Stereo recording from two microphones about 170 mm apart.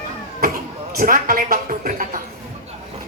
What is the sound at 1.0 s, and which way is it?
A woman's voice, 55° right (ahead or behind).